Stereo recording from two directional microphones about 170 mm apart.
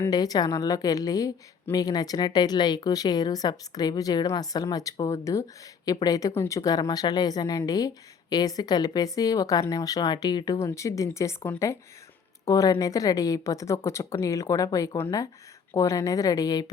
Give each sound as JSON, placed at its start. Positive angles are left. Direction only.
{"t": 0.0, "sound": "speech", "side_deg": 20}